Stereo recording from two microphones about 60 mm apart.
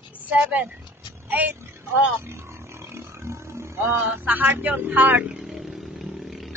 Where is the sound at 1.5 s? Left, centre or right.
Right.